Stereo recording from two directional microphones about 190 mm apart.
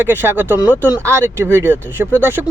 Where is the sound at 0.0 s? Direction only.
10° right (ahead or behind).